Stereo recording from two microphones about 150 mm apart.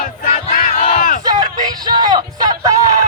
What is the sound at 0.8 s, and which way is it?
Crowd, 65° left (ahead or behind).